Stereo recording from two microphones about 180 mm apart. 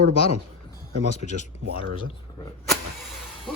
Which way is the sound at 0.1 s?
35° left (ahead or behind).